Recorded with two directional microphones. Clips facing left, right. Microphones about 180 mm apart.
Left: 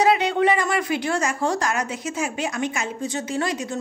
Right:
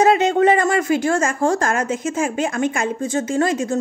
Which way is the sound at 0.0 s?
45° right (ahead or behind).